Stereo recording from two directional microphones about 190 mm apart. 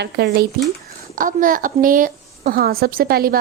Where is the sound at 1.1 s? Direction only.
45° right (ahead or behind).